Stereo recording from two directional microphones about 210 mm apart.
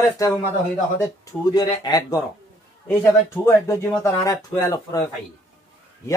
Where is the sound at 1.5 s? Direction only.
20° left (ahead or behind).